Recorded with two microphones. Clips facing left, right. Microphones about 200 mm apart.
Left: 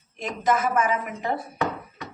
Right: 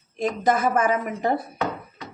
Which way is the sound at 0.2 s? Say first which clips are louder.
Right 3 dB; 35° right (ahead or behind).